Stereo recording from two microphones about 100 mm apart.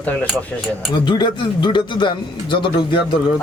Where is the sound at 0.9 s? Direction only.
50° left (ahead or behind).